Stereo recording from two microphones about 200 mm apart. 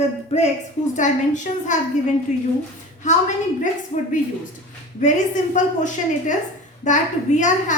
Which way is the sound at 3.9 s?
35° left (ahead or behind).